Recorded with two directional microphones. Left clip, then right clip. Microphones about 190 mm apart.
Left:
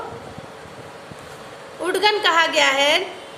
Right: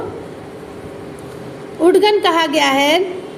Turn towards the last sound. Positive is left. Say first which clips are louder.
# right 3 dB
turn(degrees=-20)  # may be behind; listen again after turning